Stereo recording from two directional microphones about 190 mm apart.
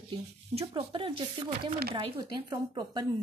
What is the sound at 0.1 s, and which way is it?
Speech, 30° right (ahead or behind).